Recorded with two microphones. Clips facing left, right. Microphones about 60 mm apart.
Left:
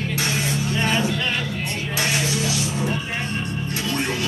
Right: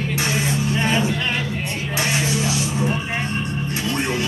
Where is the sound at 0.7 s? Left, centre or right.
Centre.